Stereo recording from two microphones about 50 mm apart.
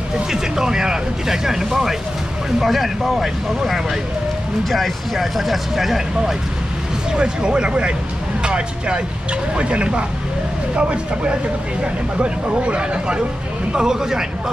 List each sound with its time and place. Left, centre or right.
0.3 s speech: centre
7.2 s speech: centre
13.7 s speech: centre